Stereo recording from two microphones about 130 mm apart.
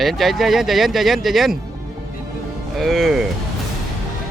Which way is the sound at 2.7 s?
Centre (ahead or behind).